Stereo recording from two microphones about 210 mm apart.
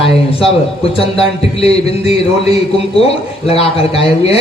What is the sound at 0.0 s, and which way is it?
A man's voice, 25° left (ahead or behind).